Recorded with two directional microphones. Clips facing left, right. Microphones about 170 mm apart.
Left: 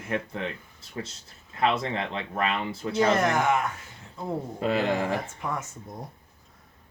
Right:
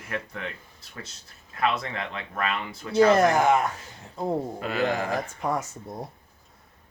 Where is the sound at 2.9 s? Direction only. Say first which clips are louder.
Right 5 dB; 35° right (ahead or behind).